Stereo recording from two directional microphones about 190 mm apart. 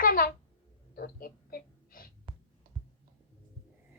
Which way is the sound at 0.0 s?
50° left (ahead or behind).